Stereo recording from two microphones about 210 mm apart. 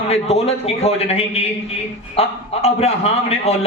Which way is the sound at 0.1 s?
30° left (ahead or behind).